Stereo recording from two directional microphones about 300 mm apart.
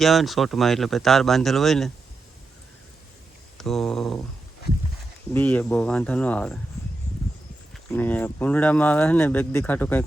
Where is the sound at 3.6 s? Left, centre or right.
Centre.